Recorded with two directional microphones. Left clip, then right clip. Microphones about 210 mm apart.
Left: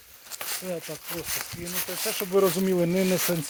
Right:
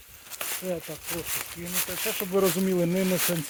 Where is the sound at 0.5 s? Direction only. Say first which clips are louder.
Even; 20° left (ahead or behind).